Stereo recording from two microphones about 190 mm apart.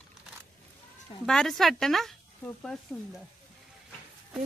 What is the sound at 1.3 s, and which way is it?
A woman's voice, 5° left (ahead or behind).